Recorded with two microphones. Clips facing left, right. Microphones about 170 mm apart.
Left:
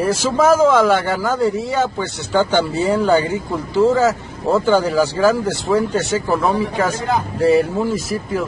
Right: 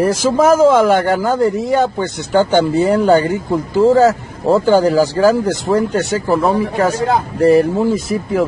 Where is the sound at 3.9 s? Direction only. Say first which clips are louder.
Right 5 dB; 35° right (ahead or behind).